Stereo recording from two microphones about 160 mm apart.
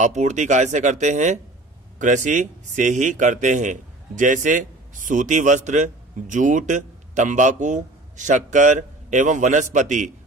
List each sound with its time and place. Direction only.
0.0 s a man's voice: 50° right (ahead or behind)